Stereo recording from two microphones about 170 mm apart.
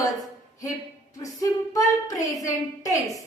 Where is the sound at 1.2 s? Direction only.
20° left (ahead or behind).